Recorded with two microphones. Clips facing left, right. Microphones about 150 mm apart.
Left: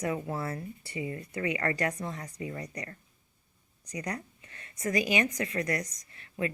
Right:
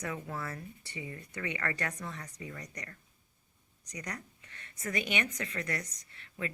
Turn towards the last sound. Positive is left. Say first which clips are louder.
# left 6 dB
turn(degrees=35)  # may be behind; listen again after turning